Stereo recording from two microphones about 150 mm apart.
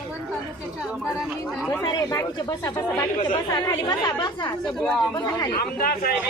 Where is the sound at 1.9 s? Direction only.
25° left (ahead or behind).